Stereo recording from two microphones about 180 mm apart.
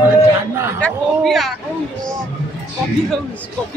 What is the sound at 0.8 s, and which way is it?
Speech, centre (ahead or behind).